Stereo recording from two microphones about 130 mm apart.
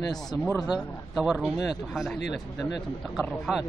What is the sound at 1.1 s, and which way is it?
Speech, 5° right (ahead or behind).